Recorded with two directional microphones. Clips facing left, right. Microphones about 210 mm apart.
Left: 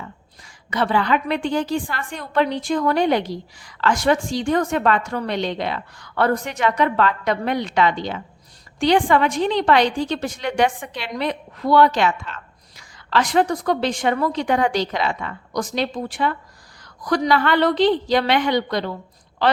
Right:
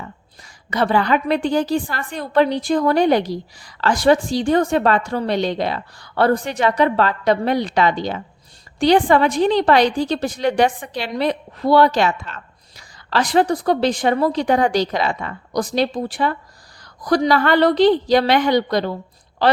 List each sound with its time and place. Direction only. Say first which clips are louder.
0.4 s a woman's voice: right 3 dB; 40° right (ahead or behind)